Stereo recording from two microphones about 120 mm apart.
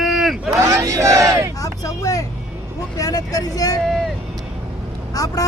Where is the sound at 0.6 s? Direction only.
25° right (ahead or behind).